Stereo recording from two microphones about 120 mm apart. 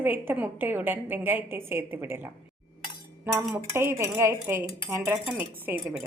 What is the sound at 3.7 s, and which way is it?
A woman's voice, 20° right (ahead or behind).